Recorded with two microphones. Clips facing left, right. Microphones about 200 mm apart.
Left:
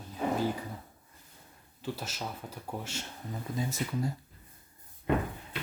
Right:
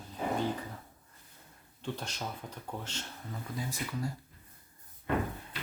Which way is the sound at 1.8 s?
5° left (ahead or behind).